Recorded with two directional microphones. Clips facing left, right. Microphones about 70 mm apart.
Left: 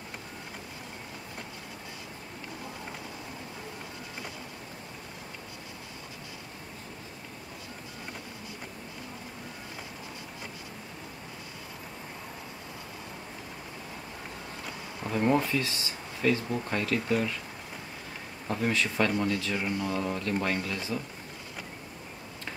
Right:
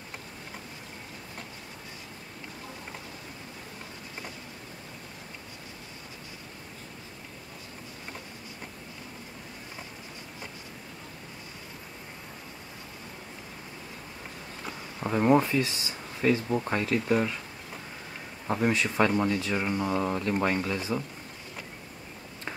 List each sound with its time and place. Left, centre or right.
15.0 s speech: right
18.5 s speech: right